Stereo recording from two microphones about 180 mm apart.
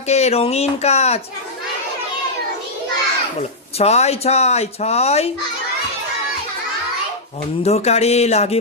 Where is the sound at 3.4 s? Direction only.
35° left (ahead or behind).